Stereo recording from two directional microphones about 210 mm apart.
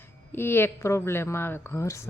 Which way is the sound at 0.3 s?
10° left (ahead or behind).